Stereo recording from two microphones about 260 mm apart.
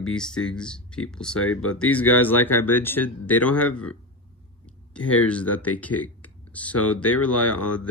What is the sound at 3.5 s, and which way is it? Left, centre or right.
Speech, left.